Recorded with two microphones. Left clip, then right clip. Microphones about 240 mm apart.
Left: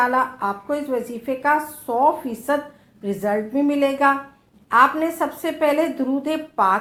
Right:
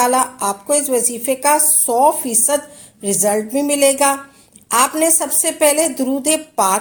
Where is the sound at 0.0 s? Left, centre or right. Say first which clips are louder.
Right 4 dB; right.